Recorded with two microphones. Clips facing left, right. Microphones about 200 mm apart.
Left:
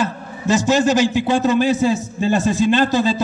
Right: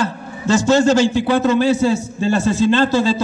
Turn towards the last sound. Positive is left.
turn(degrees=15)  # may be behind; listen again after turning